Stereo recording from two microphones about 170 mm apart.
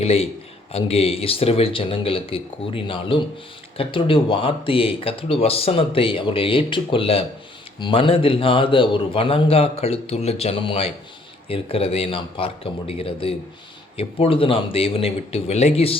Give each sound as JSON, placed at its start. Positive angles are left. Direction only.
{"t": 0.0, "sound": "speech", "side_deg": 35}